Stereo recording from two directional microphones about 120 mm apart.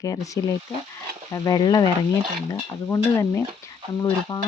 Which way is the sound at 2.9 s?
20° left (ahead or behind).